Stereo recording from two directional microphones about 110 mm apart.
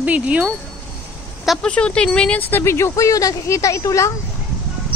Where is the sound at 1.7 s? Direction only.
10° left (ahead or behind); by 4.1 s 30° left (ahead or behind).